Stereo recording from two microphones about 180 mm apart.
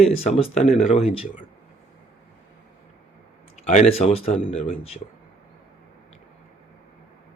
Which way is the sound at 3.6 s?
40° left (ahead or behind).